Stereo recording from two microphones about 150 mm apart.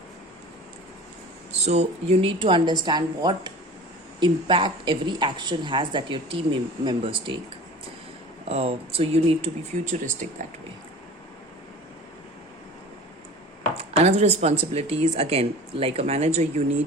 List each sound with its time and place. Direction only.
1.6 s a woman's voice: 45° right (ahead or behind)
8.4 s a woman's voice: 40° right (ahead or behind)
14.0 s speech: 45° right (ahead or behind)